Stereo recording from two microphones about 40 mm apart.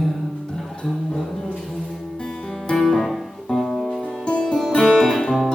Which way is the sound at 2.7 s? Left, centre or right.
Centre.